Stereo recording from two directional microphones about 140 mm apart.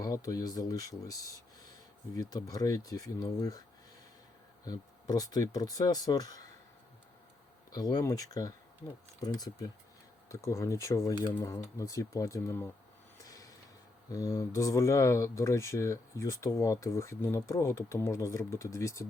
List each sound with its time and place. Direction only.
0.0 s speech: 25° left (ahead or behind)
4.6 s speech: 25° left (ahead or behind)
7.7 s speech: 30° left (ahead or behind)
13.2 s a sound: 25° left (ahead or behind)
14.1 s speech: 25° left (ahead or behind)